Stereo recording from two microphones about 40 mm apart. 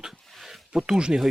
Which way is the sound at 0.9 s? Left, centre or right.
Right.